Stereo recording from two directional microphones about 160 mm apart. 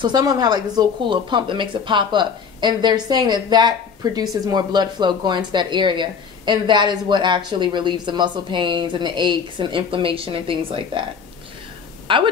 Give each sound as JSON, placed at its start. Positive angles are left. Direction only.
{"t": 0.0, "sound": "speech", "side_deg": -25}
{"t": 12.1, "sound": "a woman's voice", "side_deg": -30}